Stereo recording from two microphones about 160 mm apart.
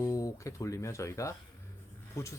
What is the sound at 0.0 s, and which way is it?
Speech, 20° left (ahead or behind).